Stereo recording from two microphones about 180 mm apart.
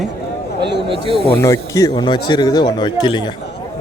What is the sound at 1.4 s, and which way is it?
A man's voice, 20° left (ahead or behind).